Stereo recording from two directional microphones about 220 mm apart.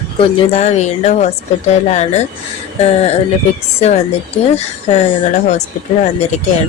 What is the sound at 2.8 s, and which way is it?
Speech, 30° left (ahead or behind).